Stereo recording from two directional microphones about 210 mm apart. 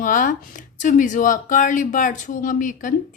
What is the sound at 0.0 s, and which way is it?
Speech, 40° left (ahead or behind).